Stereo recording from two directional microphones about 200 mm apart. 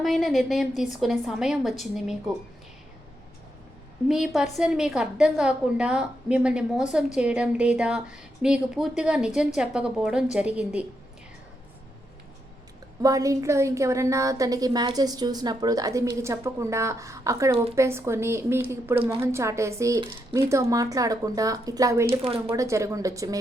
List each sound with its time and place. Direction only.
0.0 s a woman's voice: centre (ahead or behind)
4.4 s a woman's voice: centre (ahead or behind)
13.0 s a woman's voice: 15° right (ahead or behind)
22.0 s speech: 30° right (ahead or behind)
22.4 s a woman's voice: 15° right (ahead or behind)